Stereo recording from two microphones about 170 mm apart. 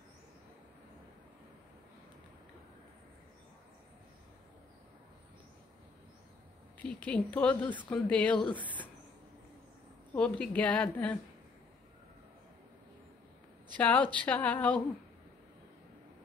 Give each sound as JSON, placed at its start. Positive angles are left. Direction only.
{"t": 7.1, "sound": "a woman's voice", "side_deg": 5}
{"t": 8.4, "sound": "speech", "side_deg": 30}
{"t": 10.1, "sound": "a woman's voice", "side_deg": 5}
{"t": 13.7, "sound": "a woman's voice", "side_deg": 10}